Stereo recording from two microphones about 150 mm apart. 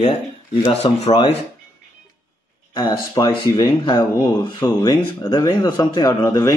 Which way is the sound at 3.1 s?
30° left (ahead or behind).